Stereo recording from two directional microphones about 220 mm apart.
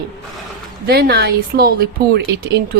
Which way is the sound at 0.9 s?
45° right (ahead or behind).